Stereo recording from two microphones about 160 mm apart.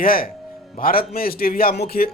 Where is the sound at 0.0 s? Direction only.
65° left (ahead or behind).